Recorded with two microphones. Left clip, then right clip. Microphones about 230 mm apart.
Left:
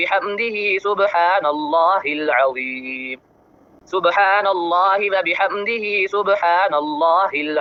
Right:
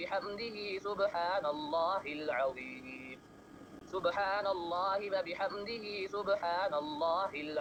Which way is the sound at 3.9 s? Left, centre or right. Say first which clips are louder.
Left 18 dB; left.